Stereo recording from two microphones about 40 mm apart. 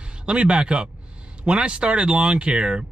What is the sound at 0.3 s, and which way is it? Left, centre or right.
Speech, right.